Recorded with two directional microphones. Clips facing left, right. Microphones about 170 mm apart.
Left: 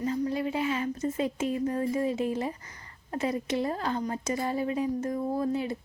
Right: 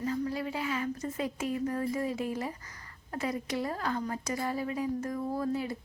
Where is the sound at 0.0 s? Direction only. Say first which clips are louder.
Left 3 dB; 20° left (ahead or behind).